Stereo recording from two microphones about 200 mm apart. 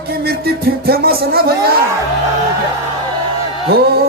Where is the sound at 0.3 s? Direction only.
50° right (ahead or behind).